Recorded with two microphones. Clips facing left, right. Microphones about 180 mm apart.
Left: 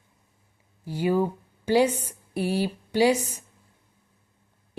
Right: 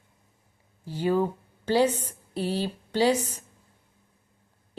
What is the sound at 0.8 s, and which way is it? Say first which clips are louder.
A woman's voice: left 1 dB; 10° left (ahead or behind).